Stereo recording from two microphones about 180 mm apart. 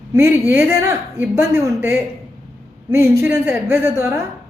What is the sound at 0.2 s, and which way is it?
A woman's voice, 10° right (ahead or behind).